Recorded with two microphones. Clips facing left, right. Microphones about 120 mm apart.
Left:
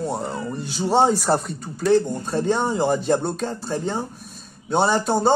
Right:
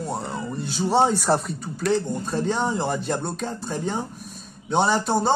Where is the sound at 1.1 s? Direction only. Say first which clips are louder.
Left 1 dB; centre (ahead or behind).